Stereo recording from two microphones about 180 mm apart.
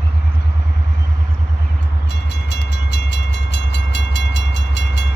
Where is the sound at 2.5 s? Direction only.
70° left (ahead or behind).